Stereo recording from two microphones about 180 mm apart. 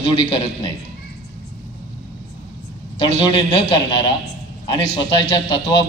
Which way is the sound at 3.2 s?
25° left (ahead or behind).